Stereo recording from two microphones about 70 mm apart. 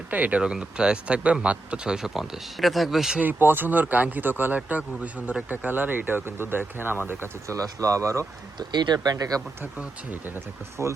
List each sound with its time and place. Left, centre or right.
0.1 s speech: centre
3.2 s speech: right
7.4 s speech: right
8.5 s speech: right
9.1 s speech: right